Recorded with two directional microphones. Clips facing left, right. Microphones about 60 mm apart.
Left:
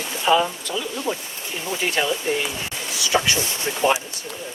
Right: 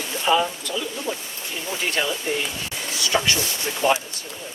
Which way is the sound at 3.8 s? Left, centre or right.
Centre.